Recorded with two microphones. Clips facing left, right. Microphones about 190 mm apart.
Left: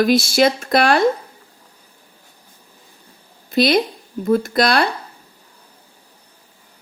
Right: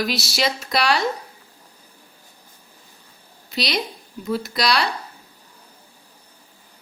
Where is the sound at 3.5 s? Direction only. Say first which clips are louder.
Left 10 dB; 50° left (ahead or behind).